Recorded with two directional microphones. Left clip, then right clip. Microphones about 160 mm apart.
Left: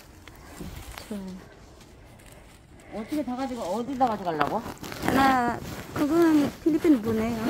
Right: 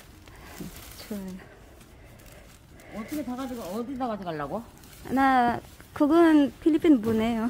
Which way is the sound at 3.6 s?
75° right (ahead or behind).